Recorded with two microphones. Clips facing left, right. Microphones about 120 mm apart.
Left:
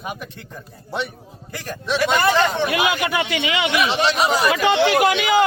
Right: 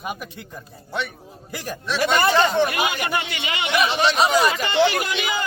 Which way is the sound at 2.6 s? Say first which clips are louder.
Left 3 dB; 90° left.